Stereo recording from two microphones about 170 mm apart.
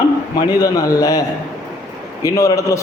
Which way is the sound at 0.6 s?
20° left (ahead or behind).